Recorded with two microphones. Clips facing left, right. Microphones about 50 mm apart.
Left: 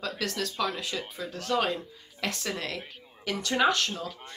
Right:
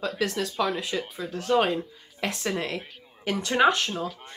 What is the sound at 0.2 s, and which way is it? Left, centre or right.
Speech, centre.